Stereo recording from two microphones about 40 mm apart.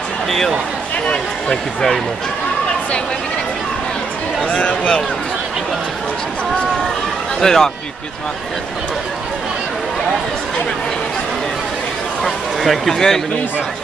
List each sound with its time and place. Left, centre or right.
1.5 s speech: centre
4.5 s speech: left
7.3 s speech: centre
12.2 s speech: centre
12.9 s speech: centre